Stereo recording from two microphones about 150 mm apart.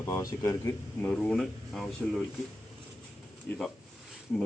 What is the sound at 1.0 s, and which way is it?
Speech, 10° left (ahead or behind).